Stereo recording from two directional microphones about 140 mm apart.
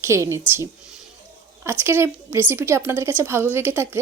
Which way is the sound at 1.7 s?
15° right (ahead or behind).